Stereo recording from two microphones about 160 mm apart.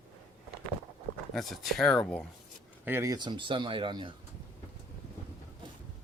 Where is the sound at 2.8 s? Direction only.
15° right (ahead or behind).